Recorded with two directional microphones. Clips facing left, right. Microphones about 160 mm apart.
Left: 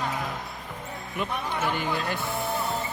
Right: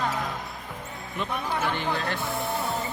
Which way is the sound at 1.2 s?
10° left (ahead or behind).